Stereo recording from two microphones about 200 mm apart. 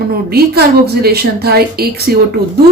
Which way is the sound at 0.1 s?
50° right (ahead or behind).